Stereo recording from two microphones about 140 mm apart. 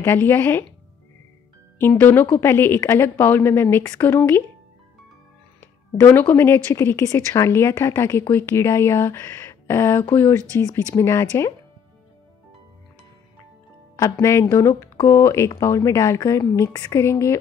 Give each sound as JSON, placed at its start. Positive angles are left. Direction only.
{"t": 0.0, "sound": "a woman's voice", "side_deg": 15}
{"t": 1.8, "sound": "a woman's voice", "side_deg": 15}
{"t": 5.6, "sound": "a woman's voice", "side_deg": 15}
{"t": 13.9, "sound": "speech", "side_deg": 25}